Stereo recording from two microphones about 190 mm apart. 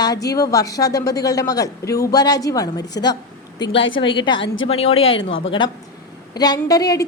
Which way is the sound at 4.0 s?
25° left (ahead or behind).